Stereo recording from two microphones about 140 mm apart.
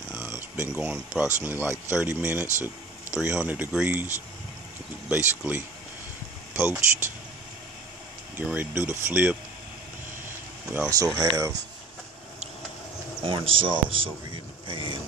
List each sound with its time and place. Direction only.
0.1 s a sound: 15° right (ahead or behind)
1.4 s speech: 15° right (ahead or behind)
5.1 s speech: 10° right (ahead or behind)
8.4 s speech: 15° right (ahead or behind)
10.9 s speech: 25° right (ahead or behind)
13.2 s speech: 40° right (ahead or behind)